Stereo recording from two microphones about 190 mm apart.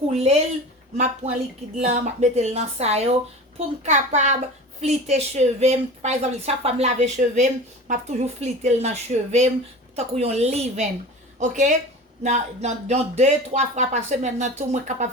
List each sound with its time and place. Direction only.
0.1 s speech: 30° right (ahead or behind)